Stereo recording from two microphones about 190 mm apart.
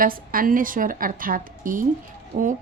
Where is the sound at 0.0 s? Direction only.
50° right (ahead or behind).